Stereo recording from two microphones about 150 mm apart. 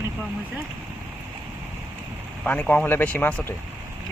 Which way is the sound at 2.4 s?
10° left (ahead or behind).